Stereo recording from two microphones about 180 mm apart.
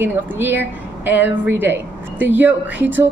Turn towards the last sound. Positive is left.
turn(degrees=-10)  # may be behind; listen again after turning